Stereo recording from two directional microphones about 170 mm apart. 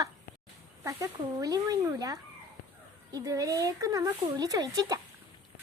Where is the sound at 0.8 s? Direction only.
20° right (ahead or behind).